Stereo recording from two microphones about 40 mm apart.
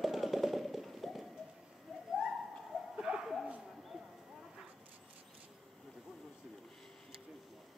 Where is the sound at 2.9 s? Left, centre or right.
Right.